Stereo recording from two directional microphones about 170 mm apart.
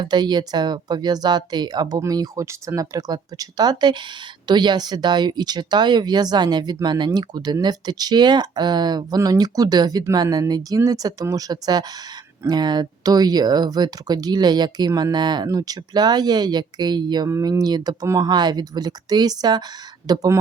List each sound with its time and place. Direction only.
0.0 s speech: 25° right (ahead or behind)